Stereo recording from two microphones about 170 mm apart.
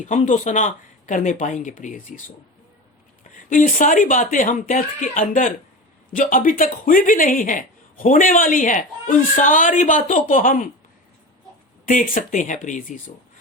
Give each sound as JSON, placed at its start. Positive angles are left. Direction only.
{"t": 0.0, "sound": "speech", "side_deg": 45}
{"t": 3.3, "sound": "speech", "side_deg": 50}
{"t": 11.9, "sound": "speech", "side_deg": 50}